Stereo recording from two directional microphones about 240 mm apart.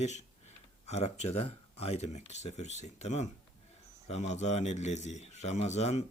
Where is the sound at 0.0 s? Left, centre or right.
Left.